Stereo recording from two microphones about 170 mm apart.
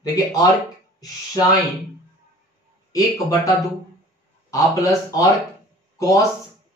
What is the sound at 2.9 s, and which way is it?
Speech, 20° left (ahead or behind).